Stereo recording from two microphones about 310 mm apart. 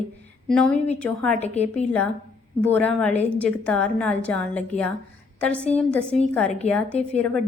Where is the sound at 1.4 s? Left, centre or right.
Left.